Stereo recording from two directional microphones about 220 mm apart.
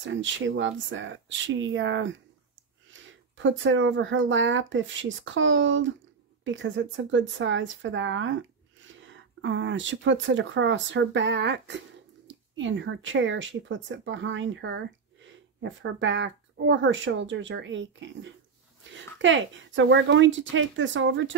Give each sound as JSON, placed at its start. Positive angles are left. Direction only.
{"t": 0.0, "sound": "speech", "side_deg": -60}